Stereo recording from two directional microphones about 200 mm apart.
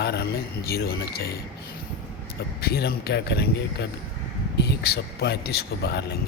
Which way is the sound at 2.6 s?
50° left (ahead or behind).